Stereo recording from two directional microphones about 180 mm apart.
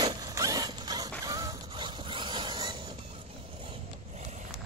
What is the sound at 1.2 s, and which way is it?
Mechanisms, 15° right (ahead or behind).